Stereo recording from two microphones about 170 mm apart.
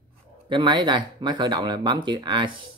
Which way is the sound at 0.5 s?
25° right (ahead or behind).